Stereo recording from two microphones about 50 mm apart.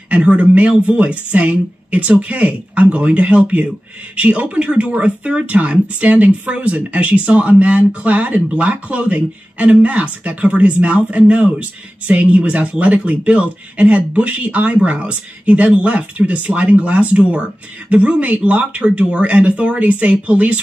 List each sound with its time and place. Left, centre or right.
0.1 s speech: right